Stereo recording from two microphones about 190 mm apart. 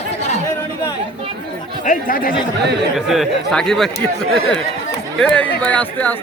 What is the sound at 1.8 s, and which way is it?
Speech, 45° left (ahead or behind).